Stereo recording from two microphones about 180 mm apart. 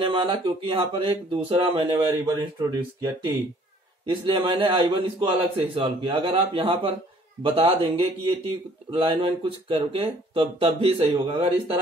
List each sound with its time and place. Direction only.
0.0 s speech: 25° right (ahead or behind)